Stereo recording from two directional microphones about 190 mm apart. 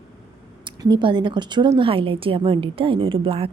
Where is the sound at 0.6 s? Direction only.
25° right (ahead or behind).